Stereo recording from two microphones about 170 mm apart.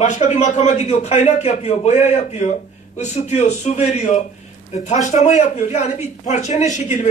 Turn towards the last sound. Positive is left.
turn(degrees=45)  # may be behind; listen again after turning